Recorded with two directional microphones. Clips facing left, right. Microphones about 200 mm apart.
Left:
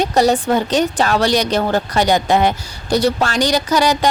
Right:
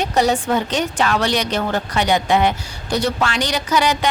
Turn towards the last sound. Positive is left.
turn(degrees=40)  # may be behind; listen again after turning